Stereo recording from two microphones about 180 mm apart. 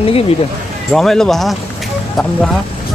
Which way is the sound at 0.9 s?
Centre (ahead or behind).